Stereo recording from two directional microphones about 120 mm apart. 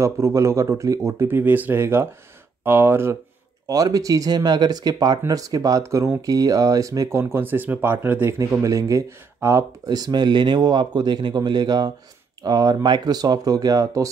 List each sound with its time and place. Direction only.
0.0 s speech: 25° right (ahead or behind)
3.6 s speech: 30° right (ahead or behind)
9.8 s speech: 35° right (ahead or behind)